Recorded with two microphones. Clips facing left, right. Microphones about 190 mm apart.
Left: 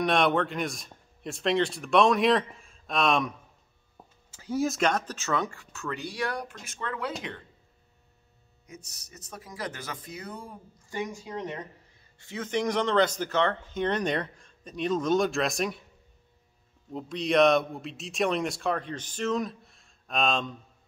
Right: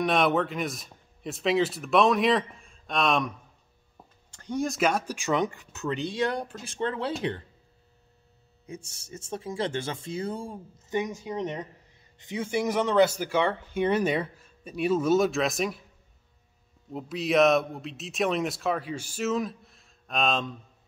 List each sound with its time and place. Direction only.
0.0 s a man's voice: centre (ahead or behind); by 7.4 s 30° right (ahead or behind)
8.6 s speech: 30° right (ahead or behind); by 15.8 s centre (ahead or behind)
16.9 s a man's voice: 5° right (ahead or behind)